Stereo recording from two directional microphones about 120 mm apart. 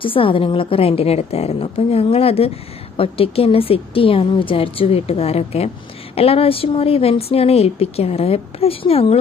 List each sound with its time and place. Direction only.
0.0 s a woman's voice: 50° left (ahead or behind)